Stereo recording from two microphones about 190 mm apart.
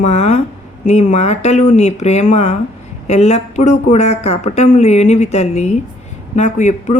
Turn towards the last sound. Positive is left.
turn(degrees=40)  # may be behind; listen again after turning